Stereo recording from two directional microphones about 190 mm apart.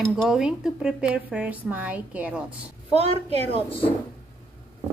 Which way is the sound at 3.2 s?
30° left (ahead or behind).